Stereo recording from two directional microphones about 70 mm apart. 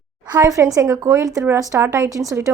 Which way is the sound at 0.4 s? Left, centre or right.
Right.